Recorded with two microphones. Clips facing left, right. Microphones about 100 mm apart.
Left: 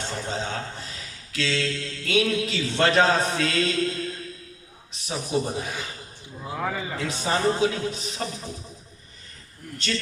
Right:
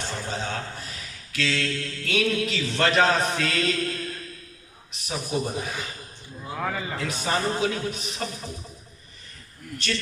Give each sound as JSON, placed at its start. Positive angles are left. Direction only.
{"t": 0.0, "sound": "a sound", "side_deg": 30}
{"t": 1.4, "sound": "speech", "side_deg": 25}
{"t": 6.6, "sound": "a man's voice", "side_deg": 5}
{"t": 7.1, "sound": "speech", "side_deg": 30}
{"t": 9.7, "sound": "speech", "side_deg": 30}